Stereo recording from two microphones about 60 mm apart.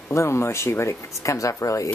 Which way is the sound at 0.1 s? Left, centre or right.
Left.